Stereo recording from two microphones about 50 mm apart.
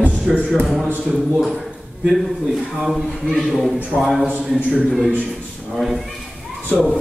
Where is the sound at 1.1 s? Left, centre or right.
Centre.